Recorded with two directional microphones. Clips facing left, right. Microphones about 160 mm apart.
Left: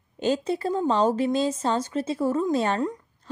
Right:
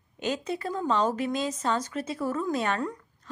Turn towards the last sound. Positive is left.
turn(degrees=25)  # may be behind; listen again after turning